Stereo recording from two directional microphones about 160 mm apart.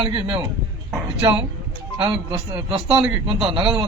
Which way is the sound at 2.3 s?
30° right (ahead or behind).